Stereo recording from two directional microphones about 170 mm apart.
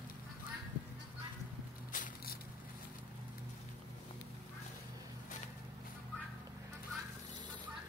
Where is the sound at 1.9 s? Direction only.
55° left (ahead or behind).